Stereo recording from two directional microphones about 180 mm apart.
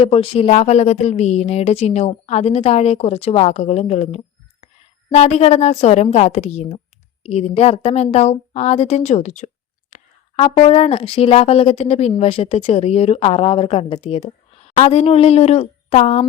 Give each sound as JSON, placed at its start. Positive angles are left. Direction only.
{"t": 0.0, "sound": "speech", "side_deg": 30}